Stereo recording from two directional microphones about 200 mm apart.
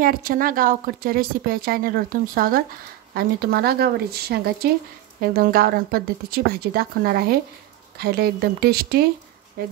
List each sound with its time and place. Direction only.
0.0 s speech: 45° right (ahead or behind)